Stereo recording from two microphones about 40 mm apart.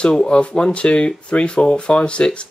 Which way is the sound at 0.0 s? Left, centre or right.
Left.